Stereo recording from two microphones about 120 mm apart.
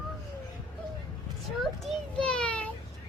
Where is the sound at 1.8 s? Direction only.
5° left (ahead or behind).